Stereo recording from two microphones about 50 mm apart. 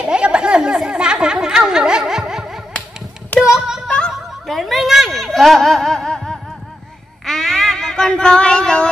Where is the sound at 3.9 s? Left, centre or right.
Centre.